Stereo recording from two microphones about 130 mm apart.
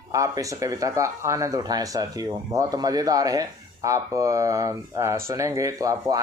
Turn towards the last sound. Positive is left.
turn(degrees=-25)  # may be behind; listen again after turning